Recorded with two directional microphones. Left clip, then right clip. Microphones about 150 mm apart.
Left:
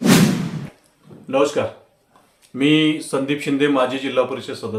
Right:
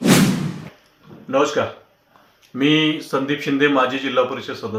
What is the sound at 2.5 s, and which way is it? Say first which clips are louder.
Speech: left 1 dB; 20° left (ahead or behind).